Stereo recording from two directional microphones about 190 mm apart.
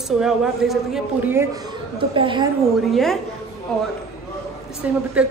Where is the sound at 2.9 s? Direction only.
Centre (ahead or behind).